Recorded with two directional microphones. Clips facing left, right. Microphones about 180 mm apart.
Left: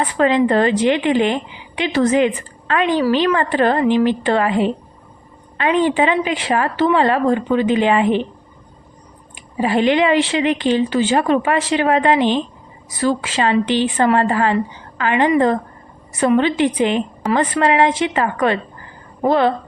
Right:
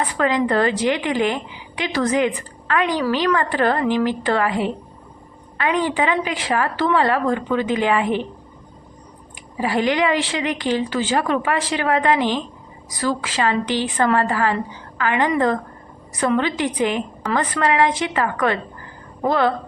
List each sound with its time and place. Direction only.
0.2 s a woman's voice: 25° left (ahead or behind)
9.3 s a woman's voice: 20° left (ahead or behind)
16.3 s a woman's voice: 20° left (ahead or behind)